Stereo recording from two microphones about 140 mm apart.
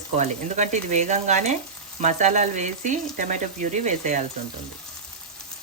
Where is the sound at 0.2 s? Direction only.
55° right (ahead or behind).